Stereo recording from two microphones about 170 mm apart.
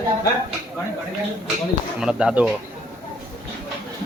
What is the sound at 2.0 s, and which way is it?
Speech, 5° right (ahead or behind).